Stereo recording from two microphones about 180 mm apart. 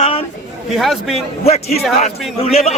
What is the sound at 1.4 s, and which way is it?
Speech, 35° left (ahead or behind).